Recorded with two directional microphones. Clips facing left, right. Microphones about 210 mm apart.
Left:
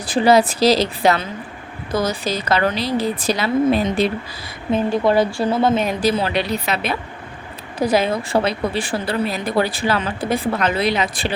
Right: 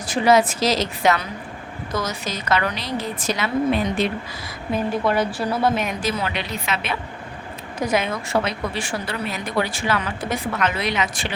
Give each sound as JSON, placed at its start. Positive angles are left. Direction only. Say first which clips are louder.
{"t": 0.0, "sound": "a woman's voice", "louder": "left 3 dB", "side_deg": 35}
{"t": 4.7, "sound": "a woman's voice", "louder": "left 5 dB", "side_deg": 25}